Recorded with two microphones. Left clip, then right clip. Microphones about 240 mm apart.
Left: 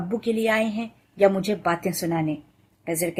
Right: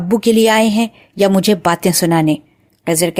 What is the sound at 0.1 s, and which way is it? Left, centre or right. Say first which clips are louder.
A woman's voice: right 12 dB; right.